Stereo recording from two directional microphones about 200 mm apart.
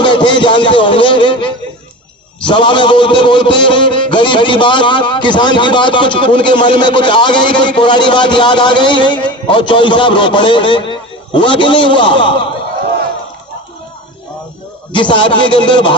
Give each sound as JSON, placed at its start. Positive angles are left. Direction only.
{"t": 0.0, "sound": "a sound", "side_deg": 25}
{"t": 2.4, "sound": "music", "side_deg": 25}
{"t": 14.9, "sound": "music", "side_deg": 25}